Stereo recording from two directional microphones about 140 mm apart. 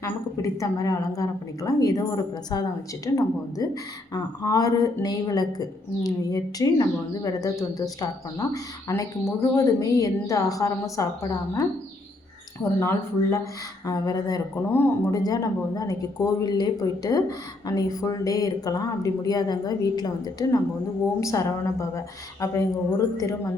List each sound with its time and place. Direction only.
0.0 s a woman's voice: 20° left (ahead or behind)